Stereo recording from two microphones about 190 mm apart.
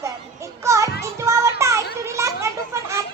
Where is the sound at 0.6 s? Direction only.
15° right (ahead or behind).